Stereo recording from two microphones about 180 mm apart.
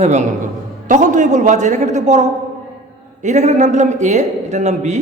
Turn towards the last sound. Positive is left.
turn(degrees=-40)  # may be behind; listen again after turning